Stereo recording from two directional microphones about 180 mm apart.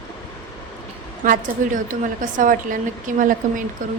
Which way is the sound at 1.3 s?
45° right (ahead or behind).